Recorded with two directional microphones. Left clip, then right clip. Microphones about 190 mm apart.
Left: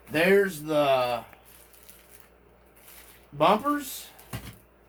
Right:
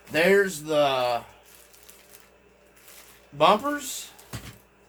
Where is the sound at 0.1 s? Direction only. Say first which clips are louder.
Right 1 dB; 30° right (ahead or behind).